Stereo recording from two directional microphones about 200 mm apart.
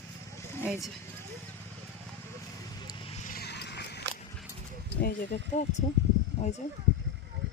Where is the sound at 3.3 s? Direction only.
55° left (ahead or behind).